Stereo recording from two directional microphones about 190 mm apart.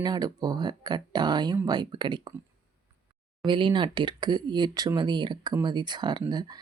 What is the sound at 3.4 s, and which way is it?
Speech, 25° right (ahead or behind).